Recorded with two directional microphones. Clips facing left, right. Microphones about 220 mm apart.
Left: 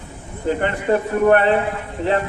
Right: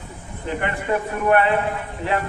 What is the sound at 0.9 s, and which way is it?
Speech, 40° left (ahead or behind).